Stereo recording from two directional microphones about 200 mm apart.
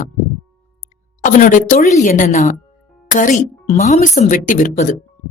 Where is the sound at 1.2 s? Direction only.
40° left (ahead or behind).